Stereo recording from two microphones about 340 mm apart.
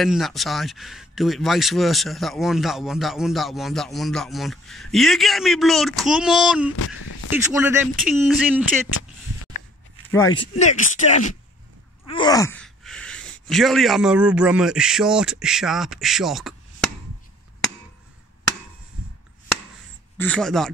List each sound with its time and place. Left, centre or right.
0.0 s speech: centre
6.8 s a sound: left
7.2 s speech: centre
10.1 s speech: centre
20.2 s speech: centre